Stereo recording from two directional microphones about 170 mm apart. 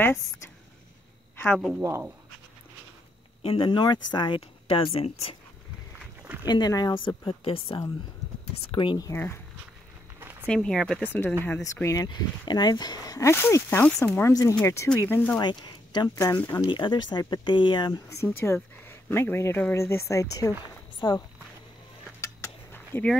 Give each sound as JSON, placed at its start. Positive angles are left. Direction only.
{"t": 1.3, "sound": "a woman's voice", "side_deg": 10}
{"t": 1.8, "sound": "speech", "side_deg": -15}
{"t": 3.4, "sound": "speech", "side_deg": 30}
{"t": 6.4, "sound": "a woman's voice", "side_deg": 25}
{"t": 9.1, "sound": "speech", "side_deg": 10}
{"t": 10.4, "sound": "speech", "side_deg": 5}
{"t": 15.4, "sound": "a woman's voice", "side_deg": 25}
{"t": 16.7, "sound": "a woman's voice", "side_deg": 25}
{"t": 18.2, "sound": "a woman's voice", "side_deg": 15}
{"t": 22.2, "sound": "a sound", "side_deg": 15}